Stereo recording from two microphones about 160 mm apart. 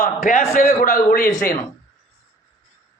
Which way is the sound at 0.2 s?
50° left (ahead or behind).